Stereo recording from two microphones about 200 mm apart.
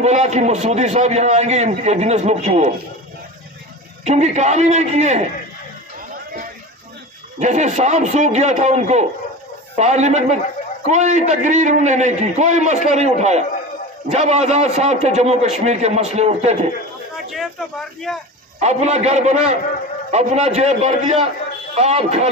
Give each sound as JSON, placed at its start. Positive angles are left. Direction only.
{"t": 0.0, "sound": "a man's voice", "side_deg": -35}
{"t": 4.0, "sound": "a man's voice", "side_deg": -35}
{"t": 7.3, "sound": "a man's voice", "side_deg": -35}
{"t": 17.3, "sound": "speech", "side_deg": 0}
{"t": 18.6, "sound": "a man's voice", "side_deg": -35}